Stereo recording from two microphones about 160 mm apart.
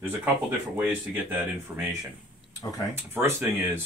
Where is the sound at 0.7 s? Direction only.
10° right (ahead or behind).